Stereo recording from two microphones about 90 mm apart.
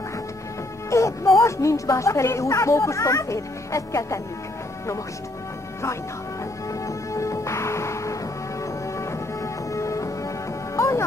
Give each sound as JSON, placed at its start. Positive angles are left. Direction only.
{"t": 0.8, "sound": "speech", "side_deg": 35}
{"t": 6.7, "sound": "music", "side_deg": 35}